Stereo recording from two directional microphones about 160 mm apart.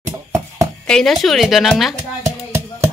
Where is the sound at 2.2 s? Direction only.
15° right (ahead or behind).